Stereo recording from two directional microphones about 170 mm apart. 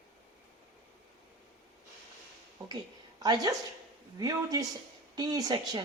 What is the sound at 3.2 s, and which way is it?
Speech, 25° right (ahead or behind).